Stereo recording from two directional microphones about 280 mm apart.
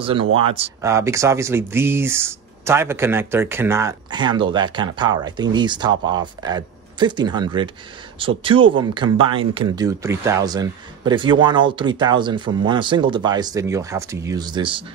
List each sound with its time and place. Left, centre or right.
0.0 s speech: centre